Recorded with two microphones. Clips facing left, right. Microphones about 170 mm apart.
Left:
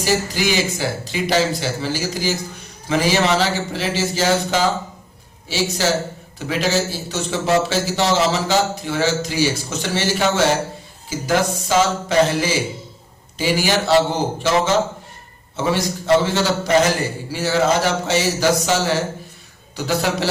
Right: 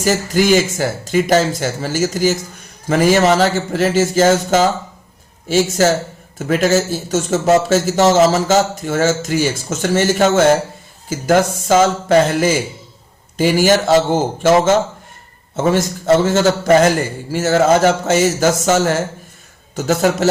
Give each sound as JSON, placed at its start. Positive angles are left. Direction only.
{"t": 0.0, "sound": "a man's voice", "side_deg": -50}